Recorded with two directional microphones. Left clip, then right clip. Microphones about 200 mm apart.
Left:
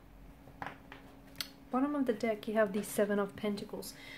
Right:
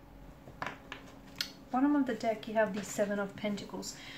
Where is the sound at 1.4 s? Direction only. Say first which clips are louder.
Right 3 dB; 50° left (ahead or behind).